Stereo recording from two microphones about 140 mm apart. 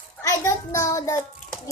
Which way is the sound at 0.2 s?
20° left (ahead or behind).